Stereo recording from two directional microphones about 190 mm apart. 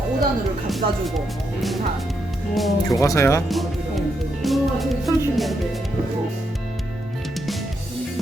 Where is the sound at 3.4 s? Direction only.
Centre (ahead or behind).